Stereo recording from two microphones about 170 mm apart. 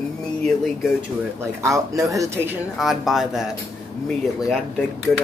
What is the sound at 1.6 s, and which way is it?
Speech, 20° right (ahead or behind).